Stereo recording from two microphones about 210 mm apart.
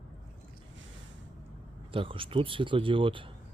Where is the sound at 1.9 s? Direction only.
25° right (ahead or behind).